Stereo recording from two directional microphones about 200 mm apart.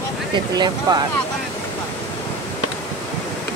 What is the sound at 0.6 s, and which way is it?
Speech, 20° right (ahead or behind).